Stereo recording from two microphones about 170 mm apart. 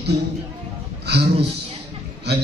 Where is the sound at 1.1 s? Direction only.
75° right (ahead or behind).